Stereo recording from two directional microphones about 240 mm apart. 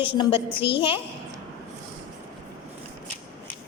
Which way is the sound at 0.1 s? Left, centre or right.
Left.